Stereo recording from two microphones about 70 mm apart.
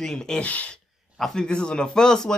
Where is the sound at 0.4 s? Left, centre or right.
Left.